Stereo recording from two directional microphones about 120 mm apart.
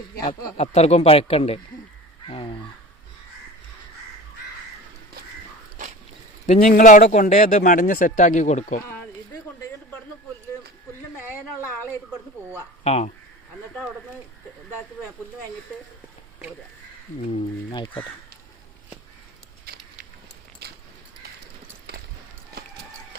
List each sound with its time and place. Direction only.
0.2 s speech: 35° left (ahead or behind)
0.5 s speech: 65° left (ahead or behind)
2.2 s crow: 50° left (ahead or behind)
6.5 s speech: 90° left
12.8 s speech: 65° left (ahead or behind)
17.7 s speech: 45° left (ahead or behind)